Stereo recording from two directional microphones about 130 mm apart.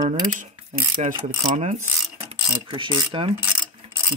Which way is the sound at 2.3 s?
40° right (ahead or behind).